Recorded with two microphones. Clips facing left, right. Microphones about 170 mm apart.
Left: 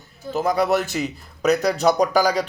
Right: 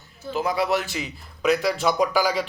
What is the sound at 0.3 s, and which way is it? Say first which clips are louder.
A man's voice: left 4 dB; 45° left (ahead or behind).